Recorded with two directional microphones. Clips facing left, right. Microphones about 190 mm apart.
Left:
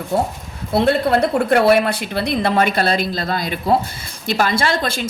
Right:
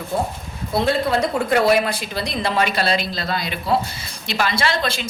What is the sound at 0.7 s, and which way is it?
A woman's voice, 60° left (ahead or behind).